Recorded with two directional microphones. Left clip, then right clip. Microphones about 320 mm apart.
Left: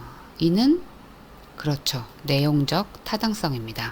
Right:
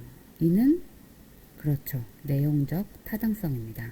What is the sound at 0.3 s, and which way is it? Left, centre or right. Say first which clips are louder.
Speech: left 4 dB; left.